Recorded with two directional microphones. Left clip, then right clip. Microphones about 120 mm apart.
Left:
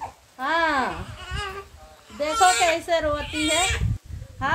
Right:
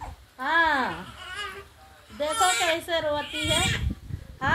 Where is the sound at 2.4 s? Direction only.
20° left (ahead or behind).